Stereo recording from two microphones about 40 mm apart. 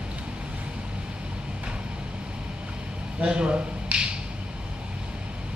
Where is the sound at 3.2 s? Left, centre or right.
Right.